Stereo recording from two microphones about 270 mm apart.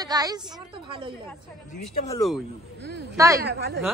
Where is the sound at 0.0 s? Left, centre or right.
Centre.